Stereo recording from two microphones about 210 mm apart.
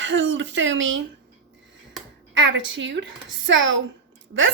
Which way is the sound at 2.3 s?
60° right (ahead or behind).